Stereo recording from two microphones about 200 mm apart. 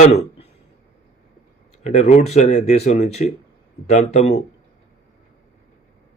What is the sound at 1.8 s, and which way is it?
Speech, 35° left (ahead or behind).